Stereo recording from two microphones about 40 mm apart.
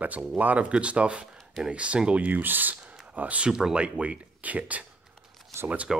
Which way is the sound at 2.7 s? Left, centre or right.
Right.